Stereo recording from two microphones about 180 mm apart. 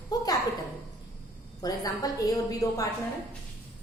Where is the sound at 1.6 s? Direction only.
20° left (ahead or behind).